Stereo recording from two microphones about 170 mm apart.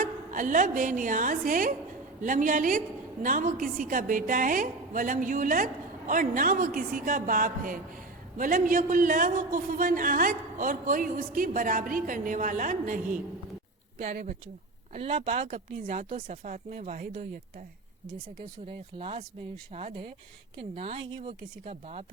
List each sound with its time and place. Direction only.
0.0 s a woman's voice: 50° right (ahead or behind)
14.9 s speech: 35° right (ahead or behind)
16.3 s a man's voice: 50° right (ahead or behind)
18.7 s speech: 35° right (ahead or behind)